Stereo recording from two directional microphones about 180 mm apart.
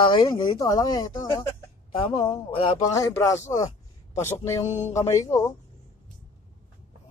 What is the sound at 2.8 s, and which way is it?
Speech, 20° left (ahead or behind).